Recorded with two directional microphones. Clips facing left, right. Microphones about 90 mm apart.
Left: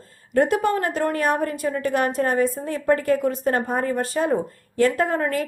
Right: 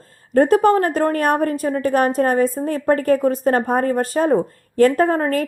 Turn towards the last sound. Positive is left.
turn(degrees=-40)  # may be behind; listen again after turning